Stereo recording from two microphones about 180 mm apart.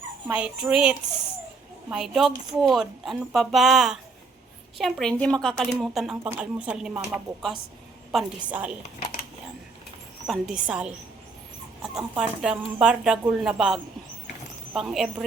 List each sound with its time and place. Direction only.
0.3 s speech: 5° right (ahead or behind)
10.2 s speech: centre (ahead or behind)